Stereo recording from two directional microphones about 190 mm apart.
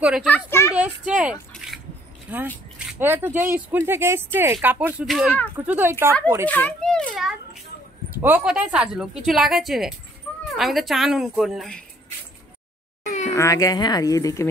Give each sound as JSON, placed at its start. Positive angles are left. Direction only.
{"t": 0.0, "sound": "speech", "side_deg": -5}
{"t": 0.3, "sound": "speech", "side_deg": 15}
{"t": 0.7, "sound": "speech", "side_deg": -5}
{"t": 1.5, "sound": "a sound", "side_deg": 0}
{"t": 2.3, "sound": "speech", "side_deg": -10}
{"t": 6.4, "sound": "speech", "side_deg": 10}
{"t": 13.3, "sound": "speech", "side_deg": 15}